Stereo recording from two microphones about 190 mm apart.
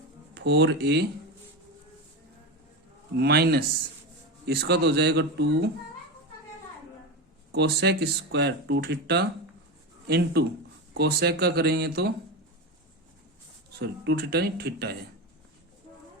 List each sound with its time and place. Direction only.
0.3 s speech: 65° right (ahead or behind)
3.2 s speech: 55° right (ahead or behind)
7.5 s speech: 60° right (ahead or behind)
13.7 s speech: 60° right (ahead or behind)